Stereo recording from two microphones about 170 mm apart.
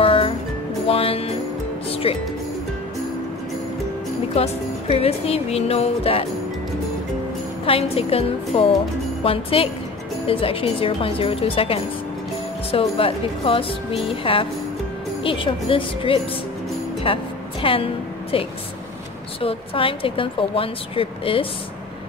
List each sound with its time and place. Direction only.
0.0 s music: 30° left (ahead or behind)
4.4 s a woman's voice: 35° left (ahead or behind)
7.6 s a woman's voice: 35° left (ahead or behind)
17.0 s music: 30° left (ahead or behind)
18.3 s a woman's voice: 35° left (ahead or behind)